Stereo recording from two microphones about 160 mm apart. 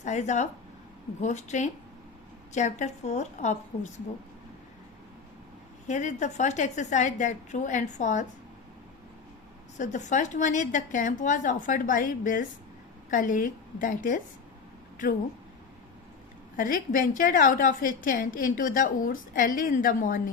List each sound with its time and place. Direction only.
0.0 s a woman's voice: 45° left (ahead or behind)
5.9 s a woman's voice: 50° left (ahead or behind)
9.7 s a woman's voice: 50° left (ahead or behind)
16.6 s a woman's voice: 60° left (ahead or behind)